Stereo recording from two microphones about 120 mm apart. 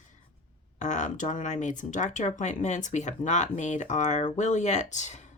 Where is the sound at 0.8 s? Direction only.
85° left.